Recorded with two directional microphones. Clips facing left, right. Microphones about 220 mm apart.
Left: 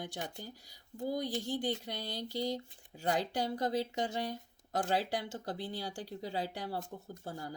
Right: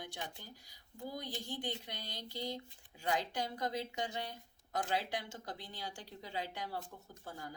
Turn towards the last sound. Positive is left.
turn(degrees=35)  # may be behind; listen again after turning